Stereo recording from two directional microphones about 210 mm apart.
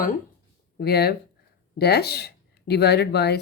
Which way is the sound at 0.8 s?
50° left (ahead or behind).